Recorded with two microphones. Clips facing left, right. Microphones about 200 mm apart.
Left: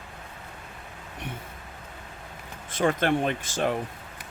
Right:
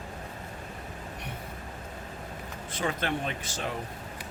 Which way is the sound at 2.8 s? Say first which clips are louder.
Left 7 dB; 50° left (ahead or behind).